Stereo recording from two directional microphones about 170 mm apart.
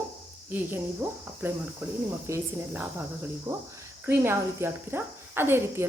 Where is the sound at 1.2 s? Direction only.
10° right (ahead or behind).